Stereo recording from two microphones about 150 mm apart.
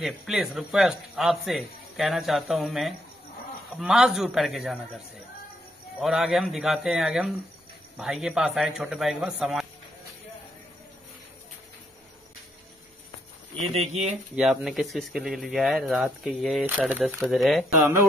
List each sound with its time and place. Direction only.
0.0 s speech: 5° right (ahead or behind)
13.9 s speech: 5° right (ahead or behind)